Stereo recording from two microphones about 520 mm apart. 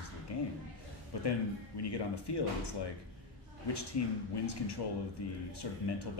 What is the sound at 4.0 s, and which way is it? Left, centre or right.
Speech, left.